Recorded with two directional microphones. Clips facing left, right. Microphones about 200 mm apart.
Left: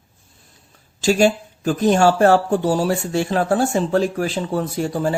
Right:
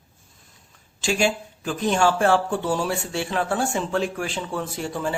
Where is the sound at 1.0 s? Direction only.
40° left (ahead or behind).